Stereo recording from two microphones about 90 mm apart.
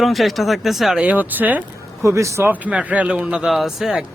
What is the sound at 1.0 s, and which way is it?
Speech, 15° right (ahead or behind).